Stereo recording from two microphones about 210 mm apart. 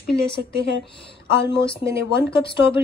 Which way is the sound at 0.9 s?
25° left (ahead or behind).